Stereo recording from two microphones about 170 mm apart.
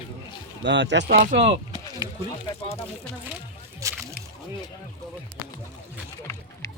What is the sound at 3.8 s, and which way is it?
Slosh, 20° right (ahead or behind).